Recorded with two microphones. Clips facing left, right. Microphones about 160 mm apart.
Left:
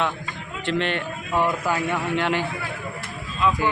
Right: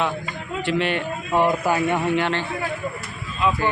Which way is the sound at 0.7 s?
10° right (ahead or behind).